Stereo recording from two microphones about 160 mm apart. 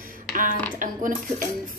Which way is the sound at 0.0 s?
60° right (ahead or behind).